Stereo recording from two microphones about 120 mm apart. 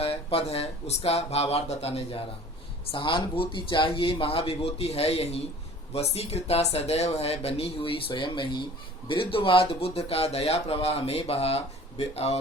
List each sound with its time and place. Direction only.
0.0 s speech: 55° left (ahead or behind)
2.8 s speech: 45° left (ahead or behind); by 12.4 s 60° left (ahead or behind)